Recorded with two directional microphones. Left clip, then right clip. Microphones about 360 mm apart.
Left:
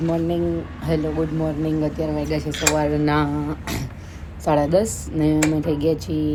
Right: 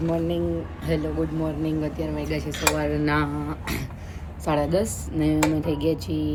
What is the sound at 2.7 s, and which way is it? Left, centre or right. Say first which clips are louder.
Speech: left 4 dB; centre.